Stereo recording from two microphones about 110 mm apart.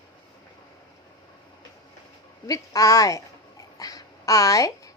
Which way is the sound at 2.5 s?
30° left (ahead or behind).